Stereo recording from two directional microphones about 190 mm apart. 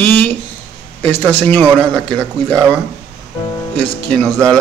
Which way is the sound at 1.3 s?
10° left (ahead or behind).